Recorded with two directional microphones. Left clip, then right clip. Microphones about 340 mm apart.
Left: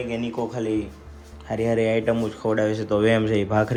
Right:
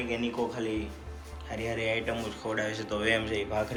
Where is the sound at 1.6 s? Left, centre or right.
Centre.